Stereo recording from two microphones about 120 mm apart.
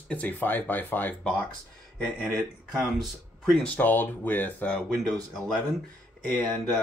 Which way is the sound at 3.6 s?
15° left (ahead or behind).